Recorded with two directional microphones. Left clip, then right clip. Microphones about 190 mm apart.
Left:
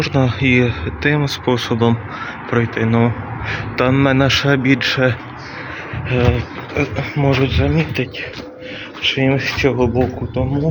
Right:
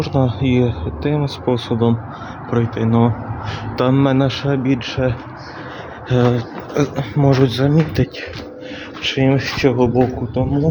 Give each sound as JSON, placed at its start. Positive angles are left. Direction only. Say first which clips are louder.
{"t": 0.0, "sound": "speech", "louder": "left 2 dB", "side_deg": -5}
{"t": 4.3, "sound": "speech", "louder": "left 5 dB", "side_deg": 5}
{"t": 6.1, "sound": "speech", "louder": "right 1 dB", "side_deg": -25}
{"t": 7.4, "sound": "speech", "louder": "right 1 dB", "side_deg": -35}
{"t": 9.1, "sound": "speech", "louder": "right 3 dB", "side_deg": -20}